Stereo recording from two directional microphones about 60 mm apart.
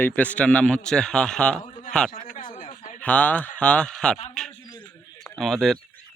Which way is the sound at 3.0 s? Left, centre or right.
Left.